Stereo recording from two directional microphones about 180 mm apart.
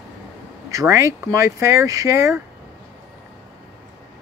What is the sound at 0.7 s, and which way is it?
Speech, 15° right (ahead or behind).